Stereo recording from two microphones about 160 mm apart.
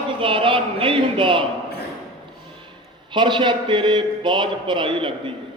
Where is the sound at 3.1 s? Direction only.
30° right (ahead or behind).